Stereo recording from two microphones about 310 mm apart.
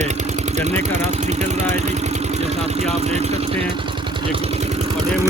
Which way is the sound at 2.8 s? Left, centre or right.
Right.